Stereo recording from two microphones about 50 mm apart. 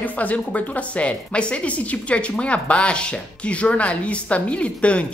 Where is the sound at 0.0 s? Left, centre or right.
Left.